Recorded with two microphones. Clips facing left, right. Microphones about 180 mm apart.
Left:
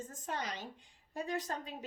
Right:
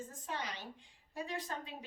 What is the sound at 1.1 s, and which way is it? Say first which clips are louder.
Speech: left 3 dB; 45° left (ahead or behind).